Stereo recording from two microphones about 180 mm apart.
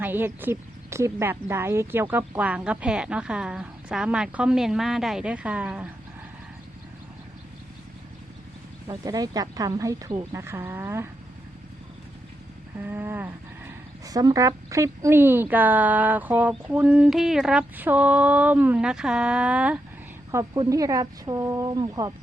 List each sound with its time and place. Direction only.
0.0 s speech: 10° right (ahead or behind)
8.9 s speech: 20° right (ahead or behind)
12.8 s speech: 10° right (ahead or behind)
20.3 s speech: 20° right (ahead or behind)